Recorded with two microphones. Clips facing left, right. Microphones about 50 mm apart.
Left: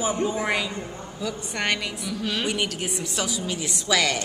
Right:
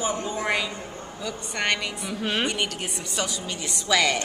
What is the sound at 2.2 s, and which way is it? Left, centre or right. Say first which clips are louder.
Speech: right 2 dB; right.